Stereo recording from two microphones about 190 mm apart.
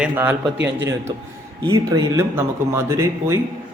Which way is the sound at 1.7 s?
20° right (ahead or behind).